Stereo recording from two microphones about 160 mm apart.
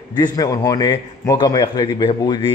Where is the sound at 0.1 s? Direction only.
25° left (ahead or behind).